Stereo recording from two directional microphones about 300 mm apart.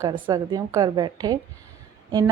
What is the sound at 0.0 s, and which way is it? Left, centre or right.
Speech, centre.